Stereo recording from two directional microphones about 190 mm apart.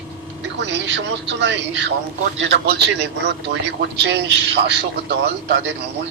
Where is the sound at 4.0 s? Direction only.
65° right (ahead or behind).